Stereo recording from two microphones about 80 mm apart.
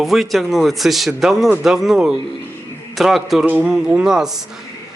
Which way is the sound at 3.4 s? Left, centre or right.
Centre.